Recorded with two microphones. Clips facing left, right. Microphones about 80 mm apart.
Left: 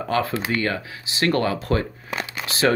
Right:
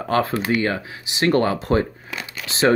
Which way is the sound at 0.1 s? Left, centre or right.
Right.